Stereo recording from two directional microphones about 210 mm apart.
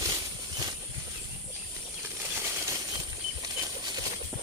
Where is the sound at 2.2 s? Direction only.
10° right (ahead or behind).